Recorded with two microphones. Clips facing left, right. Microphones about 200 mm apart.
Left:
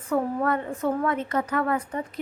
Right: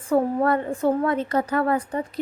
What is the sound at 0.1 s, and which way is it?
Speech, 30° right (ahead or behind).